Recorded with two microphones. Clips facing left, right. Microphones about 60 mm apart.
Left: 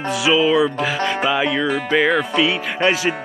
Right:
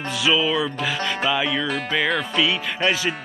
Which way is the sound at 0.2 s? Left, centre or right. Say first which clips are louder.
Left 5 dB; left.